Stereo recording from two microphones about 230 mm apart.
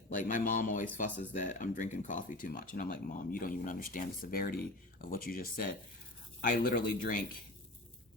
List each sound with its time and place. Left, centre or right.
0.1 s speech: left